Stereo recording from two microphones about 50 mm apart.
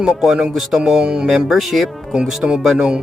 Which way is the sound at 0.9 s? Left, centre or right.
Centre.